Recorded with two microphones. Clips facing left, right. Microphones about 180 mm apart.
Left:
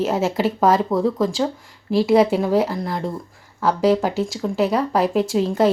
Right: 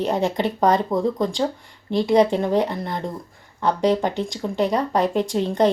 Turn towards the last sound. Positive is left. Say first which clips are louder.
# left 1 dB
turn(degrees=5)  # may be behind; listen again after turning